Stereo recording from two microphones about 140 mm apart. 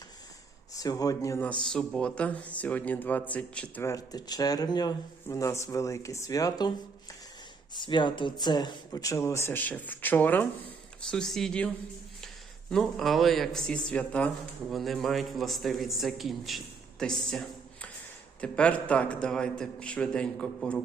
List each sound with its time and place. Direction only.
0.8 s speech: 25° left (ahead or behind)
1.6 s a man's voice: 5° left (ahead or behind)
3.8 s a man's voice: 25° left (ahead or behind); by 11.7 s 5° left (ahead or behind)
12.7 s a man's voice: centre (ahead or behind)